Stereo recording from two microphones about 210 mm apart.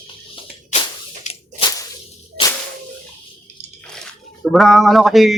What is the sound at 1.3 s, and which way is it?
Whip, 35° left (ahead or behind).